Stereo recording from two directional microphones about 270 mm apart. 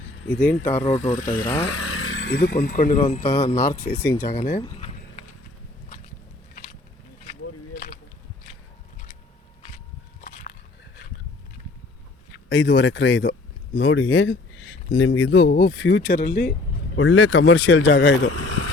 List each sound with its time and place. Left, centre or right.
0.3 s speech: centre
0.9 s speech: left
1.6 s speech: left
3.5 s speech: centre
4.3 s speech: left
4.6 s a sound: left
7.4 s a sound: left
10.2 s a sound: left
12.5 s speech: left
17.0 s speech: left
18.3 s speech: left